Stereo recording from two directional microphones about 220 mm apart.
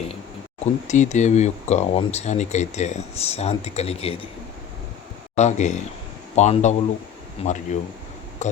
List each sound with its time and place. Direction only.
0.6 s speech: 35° left (ahead or behind)
5.4 s speech: 30° left (ahead or behind)
8.4 s a sound: 30° left (ahead or behind)